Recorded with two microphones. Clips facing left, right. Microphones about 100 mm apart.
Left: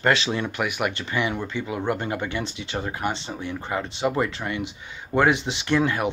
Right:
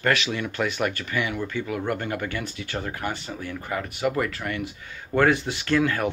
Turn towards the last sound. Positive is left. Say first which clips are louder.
# even
turn(degrees=20)  # may be behind; listen again after turning